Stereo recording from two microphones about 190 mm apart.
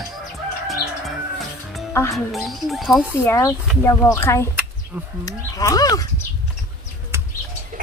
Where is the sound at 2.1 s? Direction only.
Centre (ahead or behind).